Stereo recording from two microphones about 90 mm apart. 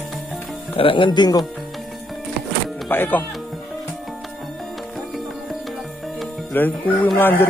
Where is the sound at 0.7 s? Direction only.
75° left (ahead or behind); by 1.4 s 55° left (ahead or behind).